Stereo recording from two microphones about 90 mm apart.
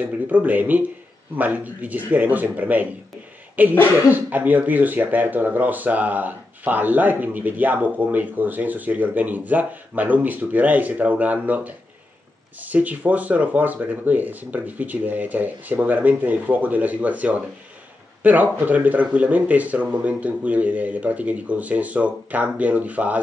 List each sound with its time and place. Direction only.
0.0 s speech: 20° right (ahead or behind)